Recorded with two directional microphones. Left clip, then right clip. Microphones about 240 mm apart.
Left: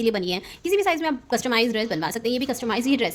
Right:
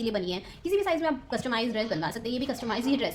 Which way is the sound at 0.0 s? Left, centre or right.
Left.